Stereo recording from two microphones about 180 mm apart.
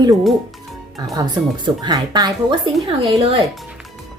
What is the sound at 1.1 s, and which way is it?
A woman's voice, 25° right (ahead or behind).